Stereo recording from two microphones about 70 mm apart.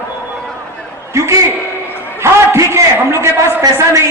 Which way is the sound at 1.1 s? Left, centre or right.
Right.